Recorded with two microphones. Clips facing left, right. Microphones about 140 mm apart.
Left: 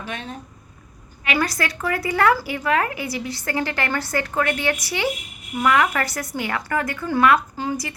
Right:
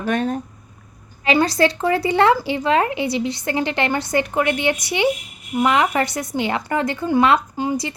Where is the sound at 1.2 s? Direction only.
25° right (ahead or behind).